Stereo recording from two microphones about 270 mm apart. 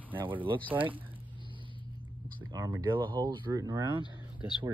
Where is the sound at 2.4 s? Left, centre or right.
Centre.